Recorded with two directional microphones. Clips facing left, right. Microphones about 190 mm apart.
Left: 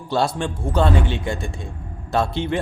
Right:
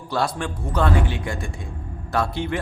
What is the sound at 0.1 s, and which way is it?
Speech, 25° left (ahead or behind).